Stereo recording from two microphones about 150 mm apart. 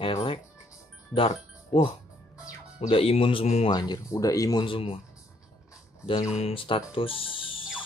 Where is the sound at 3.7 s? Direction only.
25° left (ahead or behind).